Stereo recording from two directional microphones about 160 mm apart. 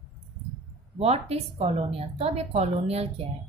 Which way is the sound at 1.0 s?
40° right (ahead or behind).